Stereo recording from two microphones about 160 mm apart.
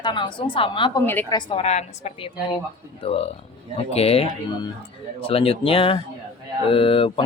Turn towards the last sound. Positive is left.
turn(degrees=35)  # may be behind; listen again after turning